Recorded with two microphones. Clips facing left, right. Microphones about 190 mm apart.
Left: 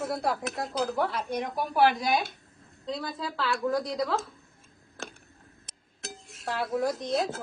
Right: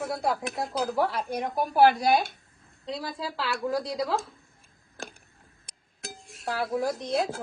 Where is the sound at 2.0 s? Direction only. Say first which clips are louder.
Right 4 dB; 45° right (ahead or behind).